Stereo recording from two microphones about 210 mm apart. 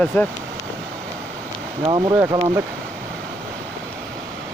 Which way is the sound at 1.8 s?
20° right (ahead or behind).